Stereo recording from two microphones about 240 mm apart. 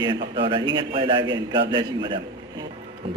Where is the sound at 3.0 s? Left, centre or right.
Right.